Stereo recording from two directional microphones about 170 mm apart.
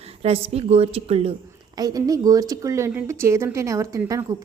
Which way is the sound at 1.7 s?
20° right (ahead or behind).